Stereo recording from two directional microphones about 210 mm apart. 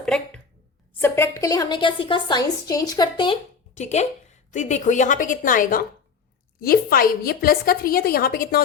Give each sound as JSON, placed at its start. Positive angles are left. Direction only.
{"t": 0.0, "sound": "a sound", "side_deg": 5}
{"t": 0.9, "sound": "a woman's voice", "side_deg": 10}
{"t": 3.8, "sound": "a woman's voice", "side_deg": 35}